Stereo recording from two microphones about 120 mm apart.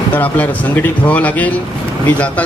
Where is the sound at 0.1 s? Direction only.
15° left (ahead or behind).